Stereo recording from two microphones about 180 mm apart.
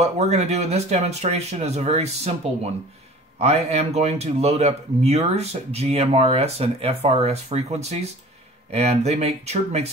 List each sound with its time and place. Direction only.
0.0 s speech: 40° right (ahead or behind)